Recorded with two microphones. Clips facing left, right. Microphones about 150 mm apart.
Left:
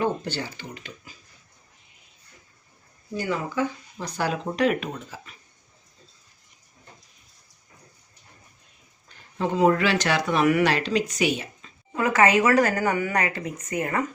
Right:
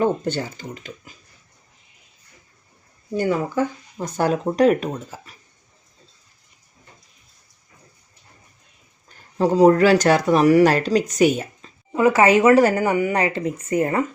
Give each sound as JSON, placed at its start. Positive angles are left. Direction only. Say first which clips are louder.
{"t": 0.0, "sound": "speech", "louder": "right 5 dB", "side_deg": -45}
{"t": 3.2, "sound": "speech", "louder": "right 6 dB", "side_deg": -45}
{"t": 9.0, "sound": "speech", "louder": "right 7 dB", "side_deg": -40}
{"t": 11.9, "sound": "speech", "louder": "right 5 dB", "side_deg": -25}